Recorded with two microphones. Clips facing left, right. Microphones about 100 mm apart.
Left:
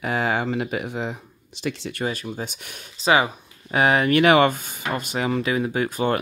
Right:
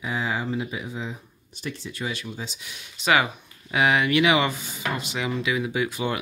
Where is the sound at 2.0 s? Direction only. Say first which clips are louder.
Left 5 dB; 45° left (ahead or behind).